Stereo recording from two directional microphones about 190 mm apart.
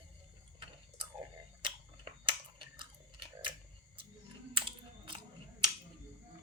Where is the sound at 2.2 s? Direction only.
25° right (ahead or behind).